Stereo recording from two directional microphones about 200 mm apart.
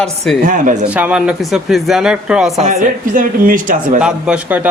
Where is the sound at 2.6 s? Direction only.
40° right (ahead or behind).